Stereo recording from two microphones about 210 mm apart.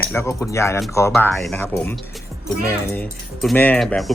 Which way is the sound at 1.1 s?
Centre (ahead or behind).